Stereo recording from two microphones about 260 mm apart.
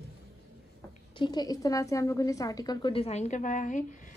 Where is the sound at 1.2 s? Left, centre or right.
Centre.